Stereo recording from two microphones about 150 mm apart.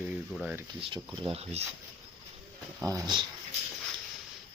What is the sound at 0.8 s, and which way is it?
Speech, 35° right (ahead or behind).